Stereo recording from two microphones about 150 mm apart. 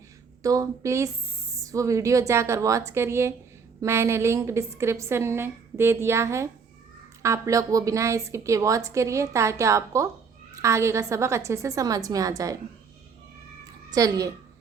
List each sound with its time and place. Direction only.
0.4 s a woman's voice: 20° right (ahead or behind)
13.9 s a woman's voice: 25° right (ahead or behind)